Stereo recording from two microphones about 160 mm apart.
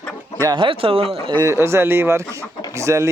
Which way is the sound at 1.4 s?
15° right (ahead or behind).